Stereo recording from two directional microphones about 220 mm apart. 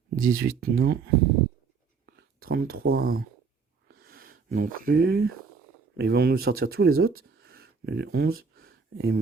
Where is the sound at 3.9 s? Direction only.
45° right (ahead or behind).